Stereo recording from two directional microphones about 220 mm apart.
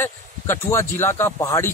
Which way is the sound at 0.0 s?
10° left (ahead or behind).